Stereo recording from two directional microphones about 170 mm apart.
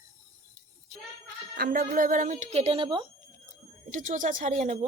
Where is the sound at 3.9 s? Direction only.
50° right (ahead or behind).